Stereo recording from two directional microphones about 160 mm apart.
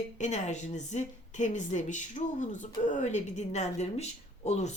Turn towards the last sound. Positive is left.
turn(degrees=45)  # may be behind; listen again after turning